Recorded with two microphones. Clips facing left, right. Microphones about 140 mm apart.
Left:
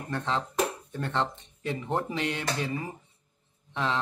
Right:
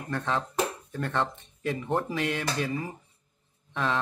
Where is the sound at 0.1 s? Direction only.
20° left (ahead or behind).